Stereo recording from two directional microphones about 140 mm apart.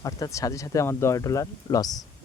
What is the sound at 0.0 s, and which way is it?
Speech, 25° left (ahead or behind).